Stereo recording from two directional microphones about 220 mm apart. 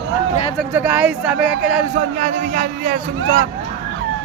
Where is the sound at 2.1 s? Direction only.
35° right (ahead or behind).